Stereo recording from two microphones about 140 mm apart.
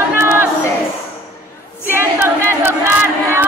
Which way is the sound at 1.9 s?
15° right (ahead or behind).